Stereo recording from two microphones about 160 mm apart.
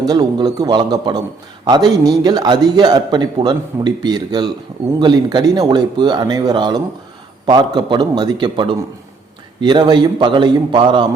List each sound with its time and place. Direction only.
0.0 s a man's voice: 25° right (ahead or behind)